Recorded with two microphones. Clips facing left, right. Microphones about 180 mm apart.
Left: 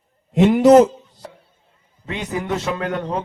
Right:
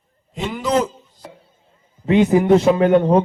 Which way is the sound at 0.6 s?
45° left (ahead or behind).